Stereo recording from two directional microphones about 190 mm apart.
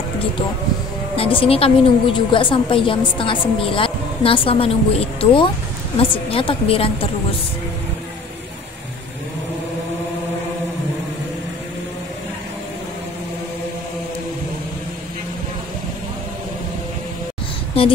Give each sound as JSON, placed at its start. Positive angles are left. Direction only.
{"t": 1.1, "sound": "a woman's voice", "side_deg": 30}
{"t": 17.8, "sound": "a woman's voice", "side_deg": 30}